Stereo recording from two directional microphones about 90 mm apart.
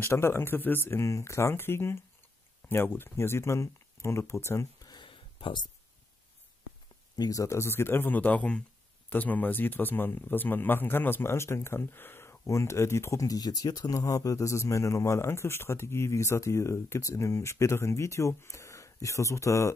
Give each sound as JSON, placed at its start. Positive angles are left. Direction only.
{"t": 0.0, "sound": "speech", "side_deg": 30}
{"t": 4.8, "sound": "a sound", "side_deg": 60}
{"t": 7.2, "sound": "speech", "side_deg": 40}